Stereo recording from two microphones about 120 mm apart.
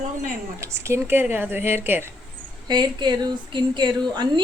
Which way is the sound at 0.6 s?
25° right (ahead or behind).